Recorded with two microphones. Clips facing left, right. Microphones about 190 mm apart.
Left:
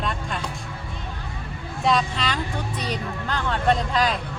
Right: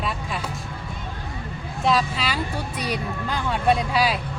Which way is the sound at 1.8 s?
5° right (ahead or behind).